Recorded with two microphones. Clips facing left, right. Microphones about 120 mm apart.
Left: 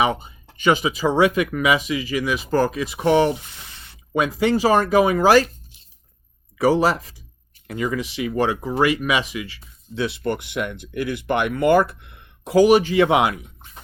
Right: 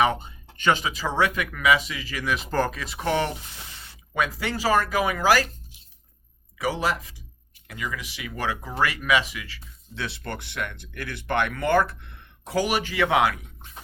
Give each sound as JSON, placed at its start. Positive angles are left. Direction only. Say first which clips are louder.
{"t": 0.0, "sound": "speech", "louder": "left 2 dB", "side_deg": 10}
{"t": 6.6, "sound": "speech", "louder": "left 8 dB", "side_deg": 35}